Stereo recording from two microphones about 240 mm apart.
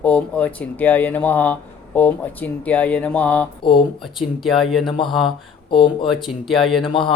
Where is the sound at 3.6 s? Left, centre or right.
Centre.